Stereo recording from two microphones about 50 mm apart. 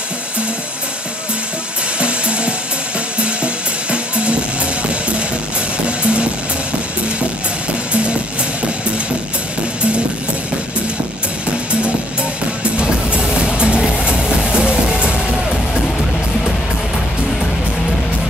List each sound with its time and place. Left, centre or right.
2.0 s music: right
5.9 s music: right
7.9 s music: right
12.7 s music: right